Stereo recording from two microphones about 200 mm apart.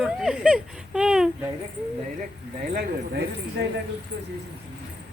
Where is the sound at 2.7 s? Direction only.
55° right (ahead or behind).